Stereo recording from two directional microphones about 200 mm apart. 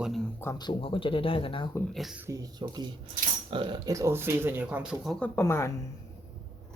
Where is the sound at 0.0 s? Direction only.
Centre (ahead or behind).